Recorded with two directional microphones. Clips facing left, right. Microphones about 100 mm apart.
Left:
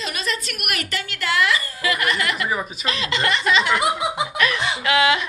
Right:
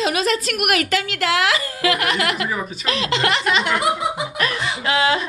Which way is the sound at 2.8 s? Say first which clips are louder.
Right 5 dB; 80° right.